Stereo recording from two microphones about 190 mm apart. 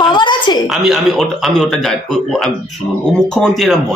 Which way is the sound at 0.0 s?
25° left (ahead or behind).